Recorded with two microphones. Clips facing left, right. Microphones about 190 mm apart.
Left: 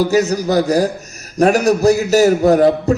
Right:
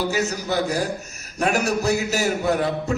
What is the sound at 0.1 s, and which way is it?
A man's voice, 40° left (ahead or behind).